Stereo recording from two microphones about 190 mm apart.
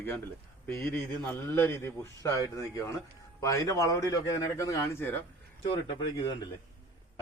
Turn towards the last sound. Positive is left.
turn(degrees=25)  # may be behind; listen again after turning